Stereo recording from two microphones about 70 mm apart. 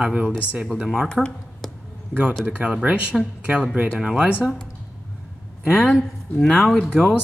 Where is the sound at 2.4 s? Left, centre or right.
Centre.